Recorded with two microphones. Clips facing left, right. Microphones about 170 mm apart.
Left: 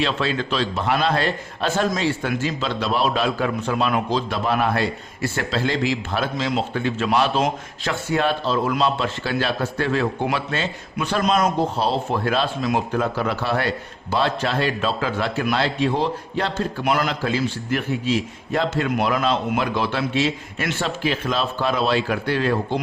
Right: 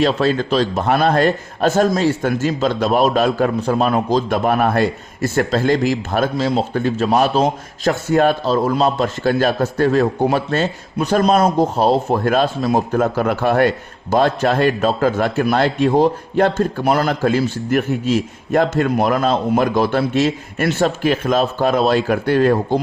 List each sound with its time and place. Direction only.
0.0 s a man's voice: 40° right (ahead or behind)